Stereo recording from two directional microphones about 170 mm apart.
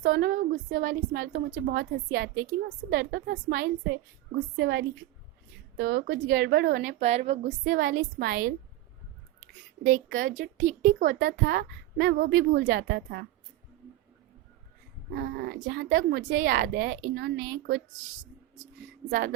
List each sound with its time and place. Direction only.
0.0 s a woman's voice: 60° right (ahead or behind)
1.6 s a woman's voice: 70° right (ahead or behind)
5.7 s speech: 65° right (ahead or behind)
6.8 s speech: 40° right (ahead or behind)
7.6 s a woman's voice: 60° right (ahead or behind)
9.8 s speech: 50° right (ahead or behind); by 13.2 s 70° right (ahead or behind)
15.1 s speech: 70° right (ahead or behind)